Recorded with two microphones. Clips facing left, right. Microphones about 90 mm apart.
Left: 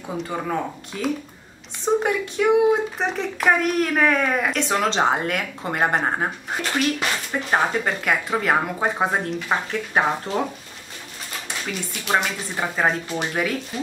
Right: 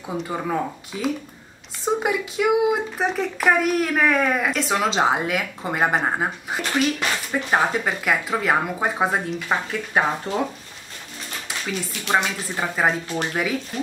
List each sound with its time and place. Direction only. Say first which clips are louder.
0.0 s speech: right 1 dB; 5° right (ahead or behind)
12.0 s speech: even; centre (ahead or behind)